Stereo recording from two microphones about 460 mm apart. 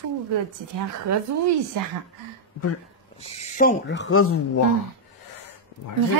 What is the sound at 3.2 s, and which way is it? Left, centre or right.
Speech, centre.